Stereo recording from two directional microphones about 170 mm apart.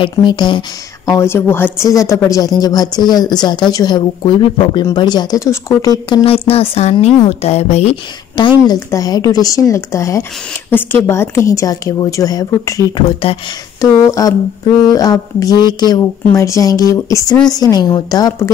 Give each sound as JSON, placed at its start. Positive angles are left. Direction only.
{"t": 0.0, "sound": "a woman's voice", "side_deg": 25}
{"t": 6.0, "sound": "speech", "side_deg": 30}
{"t": 8.4, "sound": "a woman's voice", "side_deg": 25}
{"t": 13.2, "sound": "speech", "side_deg": 30}
{"t": 13.7, "sound": "a woman's voice", "side_deg": 20}